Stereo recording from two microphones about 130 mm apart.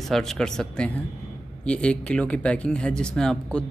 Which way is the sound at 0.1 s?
5° left (ahead or behind).